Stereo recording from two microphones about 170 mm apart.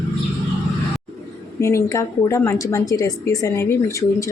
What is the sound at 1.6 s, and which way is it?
A woman's voice, 20° left (ahead or behind).